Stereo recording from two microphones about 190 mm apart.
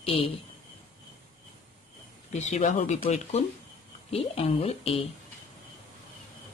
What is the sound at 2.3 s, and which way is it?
Speech, 40° left (ahead or behind).